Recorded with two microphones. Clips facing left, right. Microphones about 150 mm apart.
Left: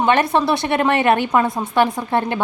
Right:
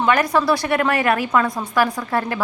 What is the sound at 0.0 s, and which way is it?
A woman's voice, 25° left (ahead or behind).